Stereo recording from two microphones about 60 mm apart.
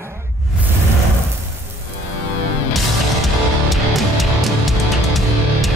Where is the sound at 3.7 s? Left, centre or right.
Centre.